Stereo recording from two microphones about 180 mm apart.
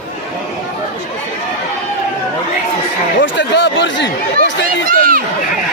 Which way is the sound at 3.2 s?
85° left.